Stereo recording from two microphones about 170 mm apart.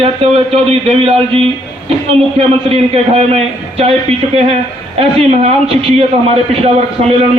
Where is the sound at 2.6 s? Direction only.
35° right (ahead or behind).